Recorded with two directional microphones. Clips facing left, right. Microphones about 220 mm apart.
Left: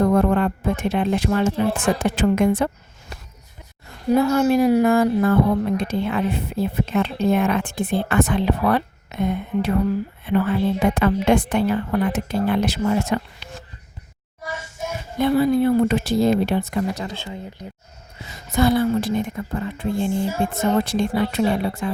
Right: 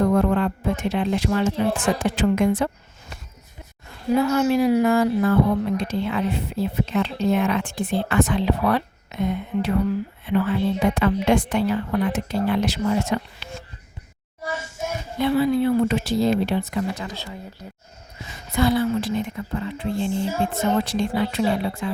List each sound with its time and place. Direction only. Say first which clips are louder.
0.1 s speech: left 2 dB; 50° left (ahead or behind)
4.1 s speech: left 2 dB; 40° left (ahead or behind)
15.2 s speech: left 2 dB; 45° left (ahead or behind)
18.5 s speech: left 2 dB; 45° left (ahead or behind)